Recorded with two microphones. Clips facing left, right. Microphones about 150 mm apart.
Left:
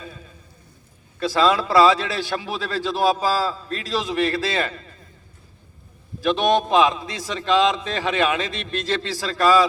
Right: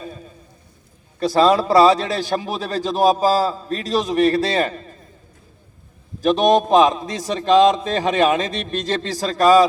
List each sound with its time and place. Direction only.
0.0 s a sound: 40° right (ahead or behind)
1.2 s a man's voice: 40° right (ahead or behind)
6.2 s a man's voice: 40° right (ahead or behind)